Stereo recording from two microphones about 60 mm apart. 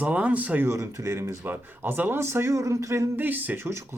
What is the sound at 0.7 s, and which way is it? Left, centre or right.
Speech, right.